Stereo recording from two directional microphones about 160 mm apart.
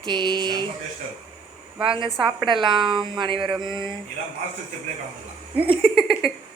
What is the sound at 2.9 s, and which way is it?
Speech, 30° right (ahead or behind).